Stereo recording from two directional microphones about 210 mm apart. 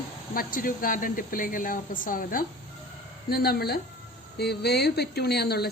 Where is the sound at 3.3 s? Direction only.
45° left (ahead or behind).